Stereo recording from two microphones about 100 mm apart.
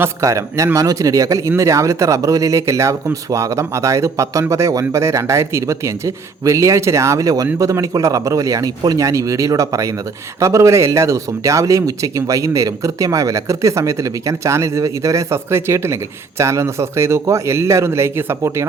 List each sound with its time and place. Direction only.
0.0 s a man's voice: 30° right (ahead or behind)